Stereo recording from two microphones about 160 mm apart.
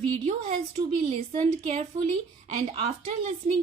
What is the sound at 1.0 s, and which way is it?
Speech, 40° right (ahead or behind).